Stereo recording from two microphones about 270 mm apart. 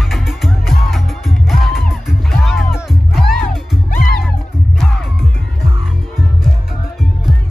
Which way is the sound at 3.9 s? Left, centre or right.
Left.